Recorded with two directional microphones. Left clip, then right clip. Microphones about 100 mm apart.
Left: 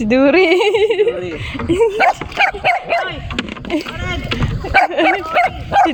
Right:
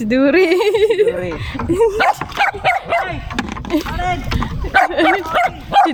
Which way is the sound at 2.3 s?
50° left (ahead or behind).